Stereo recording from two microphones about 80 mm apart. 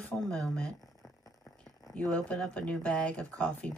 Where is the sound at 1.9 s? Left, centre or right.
Centre.